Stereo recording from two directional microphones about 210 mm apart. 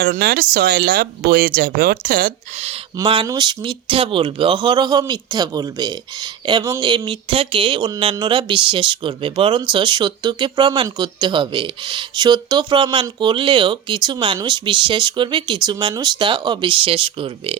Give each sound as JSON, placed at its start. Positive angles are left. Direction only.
{"t": 0.0, "sound": "speech", "side_deg": -45}
{"t": 2.6, "sound": "speech", "side_deg": -25}